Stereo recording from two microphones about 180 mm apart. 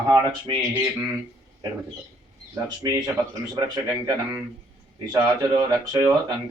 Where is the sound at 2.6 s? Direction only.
20° right (ahead or behind).